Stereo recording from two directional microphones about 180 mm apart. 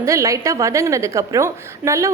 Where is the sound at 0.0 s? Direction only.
15° right (ahead or behind).